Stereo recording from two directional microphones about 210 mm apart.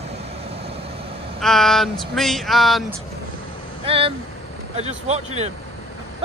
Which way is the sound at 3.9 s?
25° right (ahead or behind).